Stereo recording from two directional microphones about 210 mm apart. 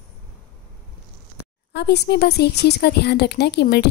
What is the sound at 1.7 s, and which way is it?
A woman's voice, 50° left (ahead or behind).